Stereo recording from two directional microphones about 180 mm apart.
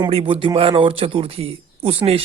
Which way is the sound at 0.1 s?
30° right (ahead or behind).